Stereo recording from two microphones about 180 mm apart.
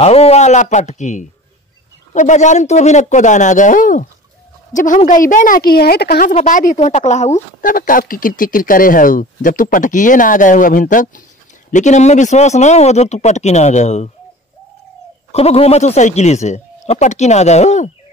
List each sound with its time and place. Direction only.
0.0 s speech: 35° left (ahead or behind); by 6.3 s 55° left (ahead or behind)
6.3 s speech: 45° left (ahead or behind)
7.6 s speech: 50° left (ahead or behind)
15.3 s speech: 35° left (ahead or behind)